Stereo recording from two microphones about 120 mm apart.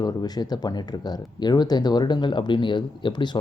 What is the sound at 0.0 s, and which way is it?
Speech, 35° left (ahead or behind).